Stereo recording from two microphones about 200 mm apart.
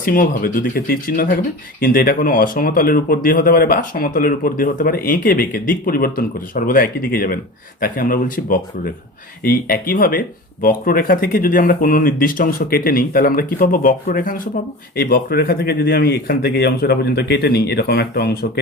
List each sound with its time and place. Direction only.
0.0 s speech: 45° left (ahead or behind)